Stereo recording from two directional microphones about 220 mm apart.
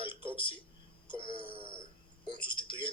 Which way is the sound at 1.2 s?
20° left (ahead or behind).